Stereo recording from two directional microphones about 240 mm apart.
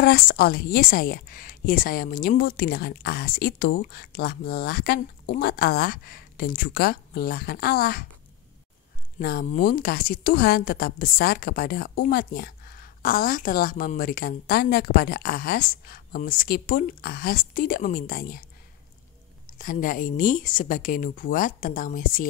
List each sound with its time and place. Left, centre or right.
0.0 s a woman's voice: left
9.2 s a woman's voice: left
19.6 s a woman's voice: left